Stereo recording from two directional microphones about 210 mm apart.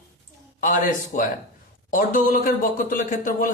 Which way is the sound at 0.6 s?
40° left (ahead or behind).